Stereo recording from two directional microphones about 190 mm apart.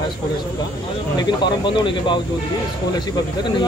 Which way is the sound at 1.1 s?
25° left (ahead or behind).